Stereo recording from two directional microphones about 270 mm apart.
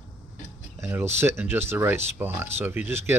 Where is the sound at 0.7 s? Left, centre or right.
Centre.